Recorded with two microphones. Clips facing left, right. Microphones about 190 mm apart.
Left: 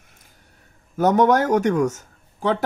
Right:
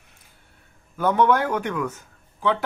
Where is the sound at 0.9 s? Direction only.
45° left (ahead or behind).